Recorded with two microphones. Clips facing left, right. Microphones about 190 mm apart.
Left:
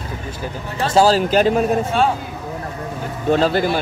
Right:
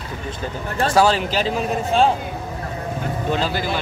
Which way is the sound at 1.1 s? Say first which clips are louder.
Left 6 dB; 45° left (ahead or behind).